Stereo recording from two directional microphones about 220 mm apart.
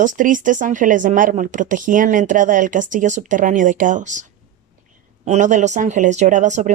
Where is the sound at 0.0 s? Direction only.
35° right (ahead or behind).